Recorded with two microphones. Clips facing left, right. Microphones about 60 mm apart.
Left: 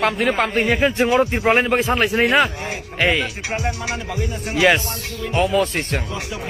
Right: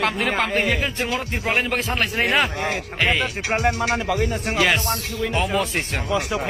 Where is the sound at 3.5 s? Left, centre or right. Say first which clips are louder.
Right 5 dB; right.